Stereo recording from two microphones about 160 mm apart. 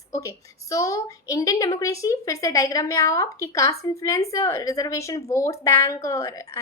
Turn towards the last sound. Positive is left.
turn(degrees=20)  # may be behind; listen again after turning